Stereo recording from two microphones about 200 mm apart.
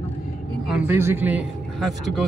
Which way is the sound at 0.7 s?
10° right (ahead or behind).